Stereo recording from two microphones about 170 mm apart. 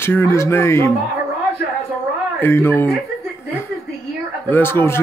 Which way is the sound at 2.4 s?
15° left (ahead or behind).